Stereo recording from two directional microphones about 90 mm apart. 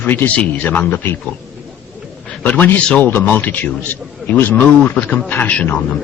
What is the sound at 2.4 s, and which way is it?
A man's voice, 20° left (ahead or behind).